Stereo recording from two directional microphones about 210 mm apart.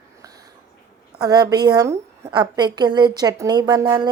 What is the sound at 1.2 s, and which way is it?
A woman's voice, 20° right (ahead or behind).